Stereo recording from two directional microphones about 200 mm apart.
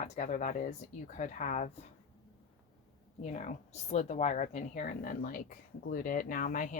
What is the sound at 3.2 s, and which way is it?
A woman's voice, 35° left (ahead or behind).